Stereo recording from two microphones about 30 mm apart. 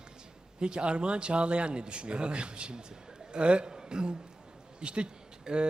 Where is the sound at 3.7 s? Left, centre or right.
Right.